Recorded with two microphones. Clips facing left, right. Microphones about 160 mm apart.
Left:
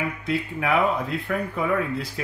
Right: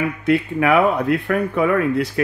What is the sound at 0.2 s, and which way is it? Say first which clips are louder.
Speech: right 9 dB; 65° right (ahead or behind).